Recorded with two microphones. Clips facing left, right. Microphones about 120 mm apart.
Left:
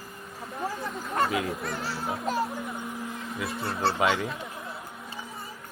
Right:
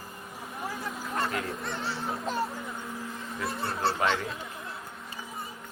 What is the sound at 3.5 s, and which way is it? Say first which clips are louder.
Speech: left 1 dB; centre (ahead or behind).